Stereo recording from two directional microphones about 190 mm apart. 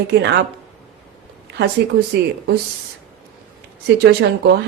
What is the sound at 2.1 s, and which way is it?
Speech, 65° right (ahead or behind).